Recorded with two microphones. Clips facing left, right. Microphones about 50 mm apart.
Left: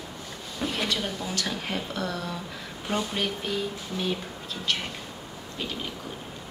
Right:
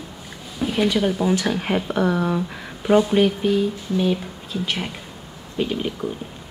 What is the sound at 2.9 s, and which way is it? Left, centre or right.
Speech, centre.